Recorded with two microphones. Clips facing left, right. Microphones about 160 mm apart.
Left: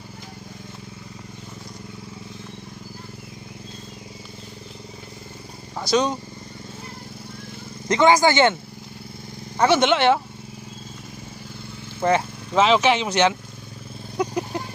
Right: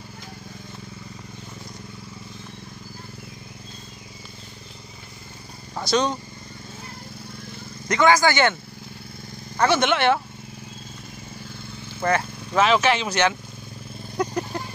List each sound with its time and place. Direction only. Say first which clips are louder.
5.8 s speech: left 1 dB; 10° left (ahead or behind)
7.9 s speech: left 2 dB; 25° left (ahead or behind)
9.6 s speech: left 2 dB; 20° left (ahead or behind)
12.0 s speech: left 3 dB; 15° left (ahead or behind)
14.1 s vehicle: left 1 dB; 5° left (ahead or behind)